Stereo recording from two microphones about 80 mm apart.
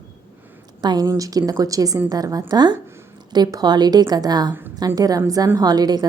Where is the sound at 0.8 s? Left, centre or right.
Right.